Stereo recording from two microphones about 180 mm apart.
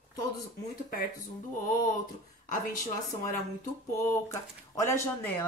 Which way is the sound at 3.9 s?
15° left (ahead or behind).